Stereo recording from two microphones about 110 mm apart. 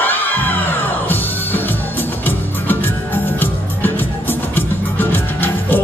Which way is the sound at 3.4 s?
20° left (ahead or behind).